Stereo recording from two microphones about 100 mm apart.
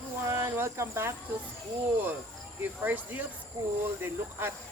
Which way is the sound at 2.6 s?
20° right (ahead or behind).